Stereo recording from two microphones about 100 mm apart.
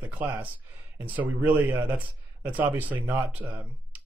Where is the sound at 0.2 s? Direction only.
15° right (ahead or behind).